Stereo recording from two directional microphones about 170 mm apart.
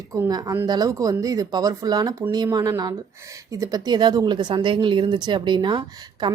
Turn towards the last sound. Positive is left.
turn(degrees=-25)  # may be behind; listen again after turning